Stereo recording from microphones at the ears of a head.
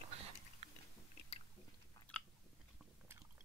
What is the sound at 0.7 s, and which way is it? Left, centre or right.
Biting, left.